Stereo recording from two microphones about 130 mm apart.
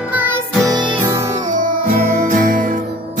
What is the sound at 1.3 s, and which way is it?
Music, 80° right.